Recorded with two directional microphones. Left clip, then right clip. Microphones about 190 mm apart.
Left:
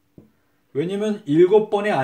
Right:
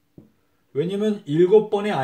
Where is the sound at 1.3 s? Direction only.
30° left (ahead or behind).